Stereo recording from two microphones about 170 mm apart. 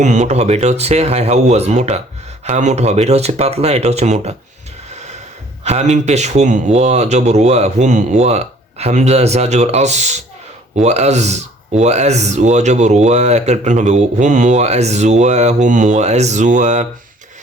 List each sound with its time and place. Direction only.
0.0 s speech: 45° right (ahead or behind)
5.6 s speech: 40° right (ahead or behind)